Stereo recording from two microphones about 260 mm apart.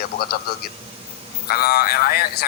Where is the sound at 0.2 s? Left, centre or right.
Left.